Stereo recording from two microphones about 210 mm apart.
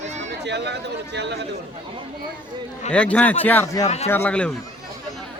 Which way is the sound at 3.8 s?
30° left (ahead or behind).